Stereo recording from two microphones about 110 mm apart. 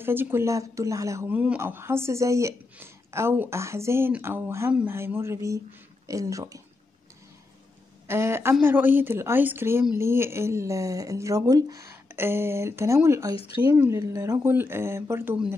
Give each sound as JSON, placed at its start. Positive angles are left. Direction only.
{"t": 0.0, "sound": "speech", "side_deg": -20}
{"t": 1.3, "sound": "speech", "side_deg": -15}
{"t": 8.1, "sound": "speech", "side_deg": -20}